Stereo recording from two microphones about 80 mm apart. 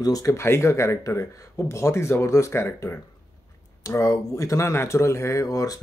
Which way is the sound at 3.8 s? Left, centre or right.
Left.